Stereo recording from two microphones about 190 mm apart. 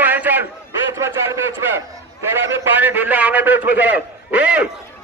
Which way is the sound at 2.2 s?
10° right (ahead or behind).